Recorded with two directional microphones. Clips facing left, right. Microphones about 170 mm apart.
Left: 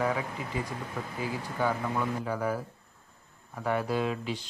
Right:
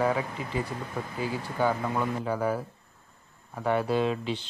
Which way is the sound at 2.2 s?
30° right (ahead or behind).